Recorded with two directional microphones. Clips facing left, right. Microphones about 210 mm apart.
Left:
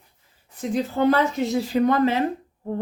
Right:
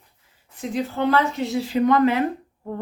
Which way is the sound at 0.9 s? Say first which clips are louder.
Left 2 dB; 45° left (ahead or behind).